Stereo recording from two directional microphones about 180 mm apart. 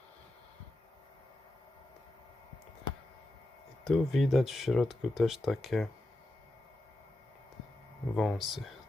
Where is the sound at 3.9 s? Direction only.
Centre (ahead or behind).